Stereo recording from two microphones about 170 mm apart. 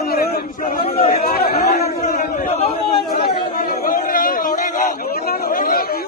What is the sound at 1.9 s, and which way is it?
Chatter, 45° left (ahead or behind).